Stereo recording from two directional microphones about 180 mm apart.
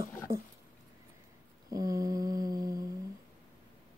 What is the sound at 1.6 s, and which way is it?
Humming, 20° right (ahead or behind).